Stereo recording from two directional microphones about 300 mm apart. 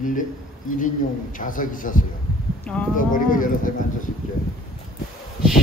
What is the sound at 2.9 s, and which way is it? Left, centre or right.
Speech, left.